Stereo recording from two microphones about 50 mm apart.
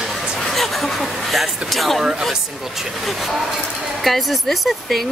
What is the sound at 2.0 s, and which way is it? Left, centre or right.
Speech, centre.